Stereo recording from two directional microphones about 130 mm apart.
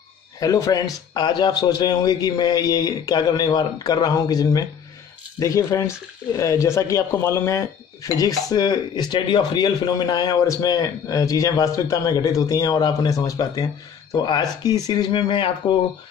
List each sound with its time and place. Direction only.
0.4 s speech: 25° left (ahead or behind)